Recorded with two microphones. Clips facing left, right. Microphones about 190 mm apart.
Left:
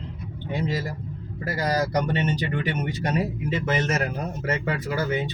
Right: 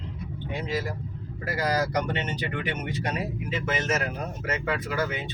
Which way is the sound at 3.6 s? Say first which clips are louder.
Left 2 dB; 35° left (ahead or behind).